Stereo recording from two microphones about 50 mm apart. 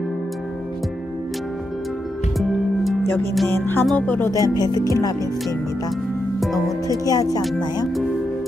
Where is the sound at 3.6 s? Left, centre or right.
Left.